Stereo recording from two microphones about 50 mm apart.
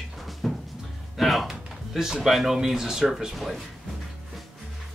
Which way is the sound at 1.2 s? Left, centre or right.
Centre.